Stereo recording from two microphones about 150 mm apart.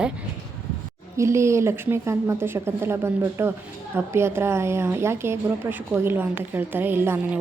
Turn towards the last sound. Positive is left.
turn(degrees=-15)  # may be behind; listen again after turning